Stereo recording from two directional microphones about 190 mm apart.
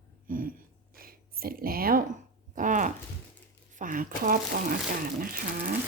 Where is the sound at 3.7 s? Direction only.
45° right (ahead or behind).